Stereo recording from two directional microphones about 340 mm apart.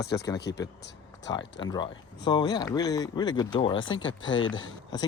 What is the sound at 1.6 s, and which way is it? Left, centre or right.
Speech, centre.